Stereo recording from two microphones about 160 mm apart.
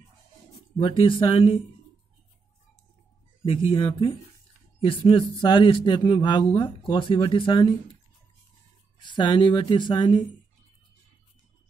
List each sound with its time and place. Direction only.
0.7 s speech: 30° left (ahead or behind)
3.4 s speech: 35° left (ahead or behind)
9.0 s speech: 30° left (ahead or behind)